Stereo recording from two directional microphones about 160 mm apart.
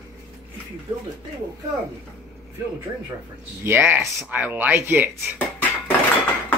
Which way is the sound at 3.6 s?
15° right (ahead or behind).